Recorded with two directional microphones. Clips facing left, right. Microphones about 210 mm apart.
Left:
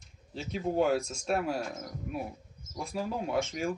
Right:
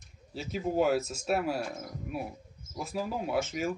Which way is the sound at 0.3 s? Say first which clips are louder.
Even; 5° right (ahead or behind).